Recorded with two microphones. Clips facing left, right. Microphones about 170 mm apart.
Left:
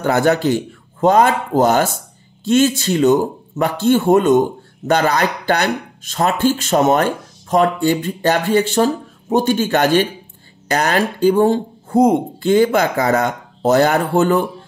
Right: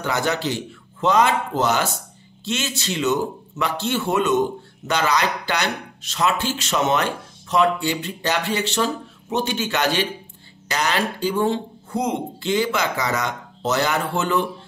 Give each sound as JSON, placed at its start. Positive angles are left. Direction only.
{"t": 0.0, "sound": "speech", "side_deg": 50}